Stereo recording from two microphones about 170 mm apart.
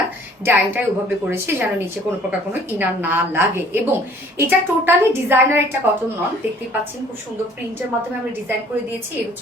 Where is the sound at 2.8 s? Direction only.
10° right (ahead or behind).